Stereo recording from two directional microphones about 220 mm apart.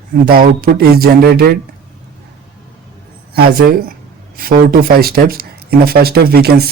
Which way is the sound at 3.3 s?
45° right (ahead or behind).